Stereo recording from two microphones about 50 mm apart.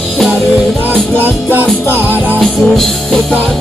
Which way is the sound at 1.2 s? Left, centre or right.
Right.